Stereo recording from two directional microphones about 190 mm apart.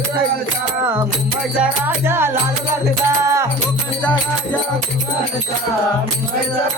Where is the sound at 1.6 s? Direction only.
10° right (ahead or behind).